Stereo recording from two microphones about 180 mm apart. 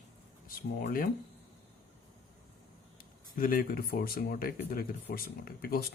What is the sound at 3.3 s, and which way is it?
Speech, 50° left (ahead or behind).